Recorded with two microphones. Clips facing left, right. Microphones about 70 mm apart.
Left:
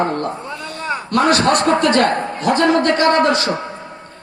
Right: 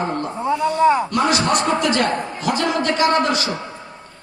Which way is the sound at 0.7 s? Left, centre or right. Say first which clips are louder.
Right 11 dB; centre.